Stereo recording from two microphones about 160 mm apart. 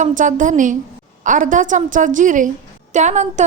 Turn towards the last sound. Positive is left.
turn(degrees=-45)  # may be behind; listen again after turning